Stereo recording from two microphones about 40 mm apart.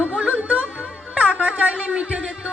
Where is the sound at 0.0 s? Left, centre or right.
Right.